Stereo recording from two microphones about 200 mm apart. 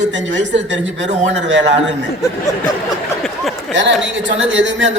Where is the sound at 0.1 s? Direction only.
65° right (ahead or behind).